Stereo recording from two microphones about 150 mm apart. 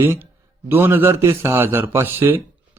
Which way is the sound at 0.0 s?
15° right (ahead or behind).